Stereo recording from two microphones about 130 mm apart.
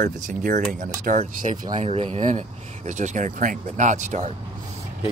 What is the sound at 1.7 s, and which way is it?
Speech, 55° right (ahead or behind).